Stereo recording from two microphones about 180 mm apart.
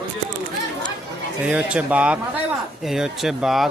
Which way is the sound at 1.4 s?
5° right (ahead or behind).